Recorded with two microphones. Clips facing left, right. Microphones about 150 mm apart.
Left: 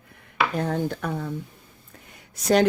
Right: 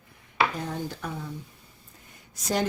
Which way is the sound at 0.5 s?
60° left (ahead or behind).